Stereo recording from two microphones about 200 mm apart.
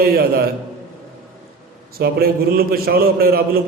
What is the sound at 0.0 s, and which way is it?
Speech, 50° right (ahead or behind).